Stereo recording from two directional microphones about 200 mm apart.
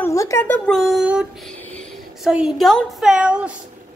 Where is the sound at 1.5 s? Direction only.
5° left (ahead or behind).